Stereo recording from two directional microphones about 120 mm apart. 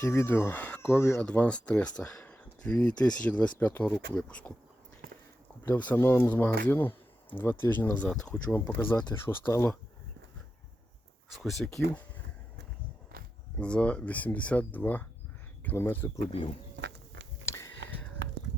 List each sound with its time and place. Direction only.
0.0 s speech: 20° left (ahead or behind)
1.2 s speech: 10° left (ahead or behind)
5.6 s speech: 15° left (ahead or behind)
11.3 s speech: centre (ahead or behind)
13.6 s speech: 10° left (ahead or behind)
16.3 s speech: 50° left (ahead or behind)
17.4 s a sound: 20° left (ahead or behind)